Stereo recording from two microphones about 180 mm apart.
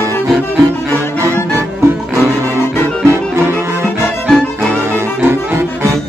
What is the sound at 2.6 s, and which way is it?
Music, 15° left (ahead or behind).